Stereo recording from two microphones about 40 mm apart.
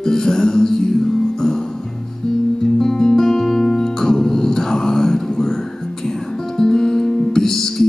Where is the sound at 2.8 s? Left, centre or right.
Centre.